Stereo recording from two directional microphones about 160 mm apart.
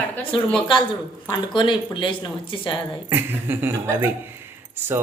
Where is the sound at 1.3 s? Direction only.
30° left (ahead or behind).